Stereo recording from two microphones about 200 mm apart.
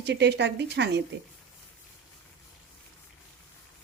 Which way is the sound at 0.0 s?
55° right (ahead or behind).